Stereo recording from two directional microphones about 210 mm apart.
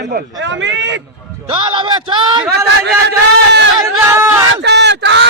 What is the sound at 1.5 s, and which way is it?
Speech, 25° right (ahead or behind).